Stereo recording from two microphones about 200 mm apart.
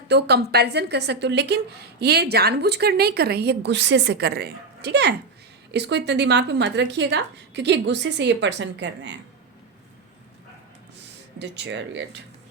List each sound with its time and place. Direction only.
0.1 s a woman's voice: 55° right (ahead or behind)
11.3 s a woman's voice: 60° right (ahead or behind)